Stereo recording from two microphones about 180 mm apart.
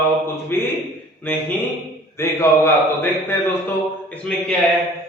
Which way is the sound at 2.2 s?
15° left (ahead or behind).